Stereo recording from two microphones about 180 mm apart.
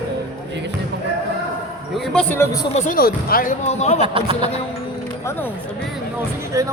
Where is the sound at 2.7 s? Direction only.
50° left (ahead or behind).